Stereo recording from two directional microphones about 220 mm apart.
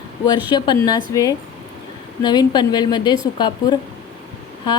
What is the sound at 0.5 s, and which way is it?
A woman's voice, 20° left (ahead or behind).